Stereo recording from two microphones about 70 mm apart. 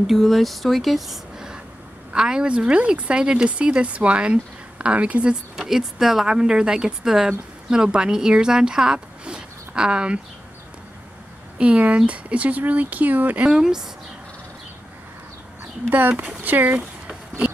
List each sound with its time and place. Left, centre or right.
0.0 s speech: centre
11.5 s speech: centre
13.5 s speech: centre
15.9 s speech: right